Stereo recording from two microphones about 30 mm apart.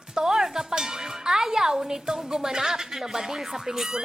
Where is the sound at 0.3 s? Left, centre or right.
Centre.